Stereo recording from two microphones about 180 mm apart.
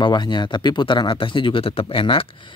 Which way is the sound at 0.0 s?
25° left (ahead or behind).